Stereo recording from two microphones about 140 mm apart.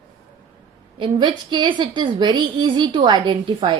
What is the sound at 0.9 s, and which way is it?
A woman's voice, 35° right (ahead or behind).